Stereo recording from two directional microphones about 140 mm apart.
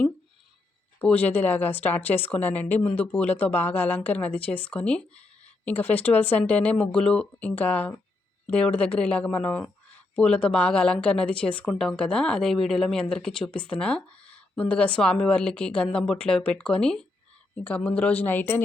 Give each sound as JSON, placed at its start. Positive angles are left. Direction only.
{"t": 0.9, "sound": "speech", "side_deg": 10}